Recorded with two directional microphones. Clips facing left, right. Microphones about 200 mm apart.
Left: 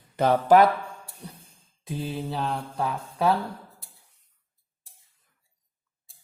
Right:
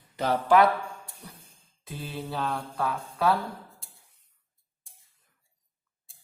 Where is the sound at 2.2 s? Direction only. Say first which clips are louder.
Left 2 dB; 20° left (ahead or behind).